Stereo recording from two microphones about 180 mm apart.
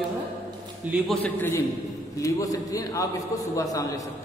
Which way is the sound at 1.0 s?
10° left (ahead or behind).